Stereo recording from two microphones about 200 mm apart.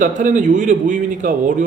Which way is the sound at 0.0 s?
40° right (ahead or behind).